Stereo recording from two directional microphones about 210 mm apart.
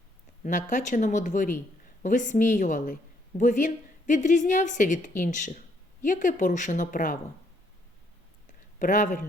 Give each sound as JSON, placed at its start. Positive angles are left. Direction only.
{"t": 0.4, "sound": "a woman's voice", "side_deg": 35}
{"t": 8.8, "sound": "a woman's voice", "side_deg": 40}